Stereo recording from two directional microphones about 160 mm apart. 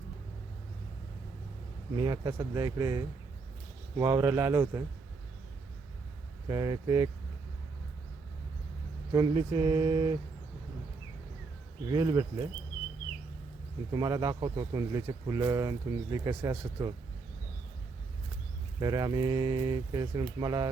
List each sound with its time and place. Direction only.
2.0 s speech: 25° right (ahead or behind)
6.5 s speech: 25° right (ahead or behind)
9.1 s speech: 25° right (ahead or behind)
11.9 s speech: 25° right (ahead or behind)
13.9 s speech: 25° right (ahead or behind)
18.8 s speech: 25° right (ahead or behind)